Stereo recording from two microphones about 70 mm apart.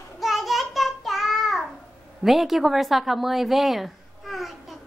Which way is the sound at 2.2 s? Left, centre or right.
Centre.